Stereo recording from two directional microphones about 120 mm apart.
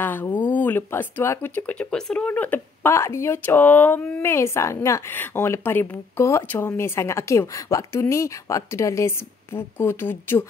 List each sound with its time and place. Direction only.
0.0 s a woman's voice: 15° left (ahead or behind)